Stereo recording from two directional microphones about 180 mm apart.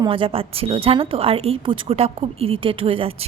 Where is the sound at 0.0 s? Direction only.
30° right (ahead or behind).